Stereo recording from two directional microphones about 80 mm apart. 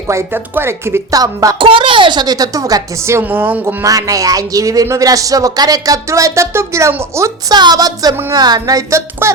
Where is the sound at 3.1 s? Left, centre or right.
Right.